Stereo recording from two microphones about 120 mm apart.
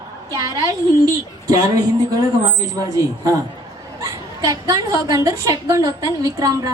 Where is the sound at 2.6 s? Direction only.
25° right (ahead or behind).